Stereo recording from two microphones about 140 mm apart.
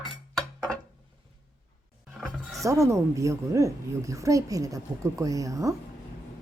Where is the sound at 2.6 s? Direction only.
25° right (ahead or behind).